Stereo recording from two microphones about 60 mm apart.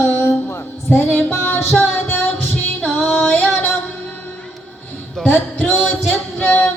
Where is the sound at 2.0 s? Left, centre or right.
Left.